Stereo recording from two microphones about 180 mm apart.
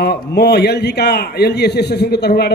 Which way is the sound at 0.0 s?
65° left (ahead or behind).